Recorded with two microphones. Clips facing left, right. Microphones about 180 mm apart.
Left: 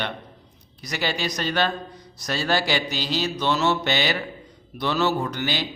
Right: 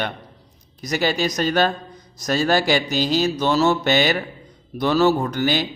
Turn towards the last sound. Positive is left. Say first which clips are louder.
# right 5 dB
turn(degrees=-50)  # may be behind; listen again after turning